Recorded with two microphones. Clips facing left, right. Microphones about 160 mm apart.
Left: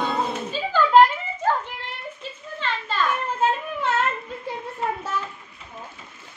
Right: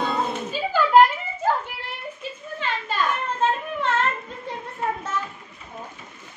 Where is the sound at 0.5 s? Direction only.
10° right (ahead or behind).